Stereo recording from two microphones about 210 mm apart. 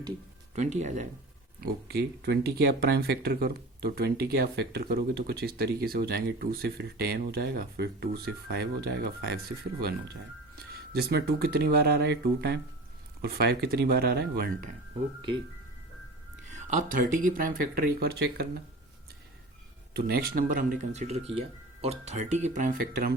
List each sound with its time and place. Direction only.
0.5 s speech: 35° right (ahead or behind)
1.6 s speech: 50° right (ahead or behind)
10.9 s speech: 50° right (ahead or behind)
16.5 s speech: 35° right (ahead or behind)
19.9 s speech: 50° right (ahead or behind)